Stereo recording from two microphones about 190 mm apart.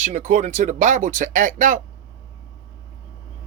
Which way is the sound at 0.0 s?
40° right (ahead or behind).